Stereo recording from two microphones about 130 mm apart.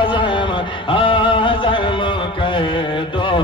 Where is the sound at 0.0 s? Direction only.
40° left (ahead or behind).